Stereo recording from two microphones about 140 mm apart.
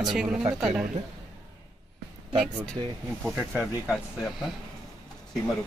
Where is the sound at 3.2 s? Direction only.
Centre (ahead or behind).